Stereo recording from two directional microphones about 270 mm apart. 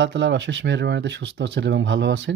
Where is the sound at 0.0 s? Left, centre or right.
Right.